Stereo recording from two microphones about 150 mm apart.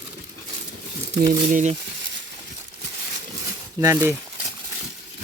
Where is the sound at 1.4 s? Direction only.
60° right (ahead or behind).